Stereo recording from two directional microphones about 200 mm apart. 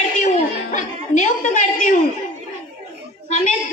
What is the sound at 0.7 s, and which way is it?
Chuckle, 40° left (ahead or behind).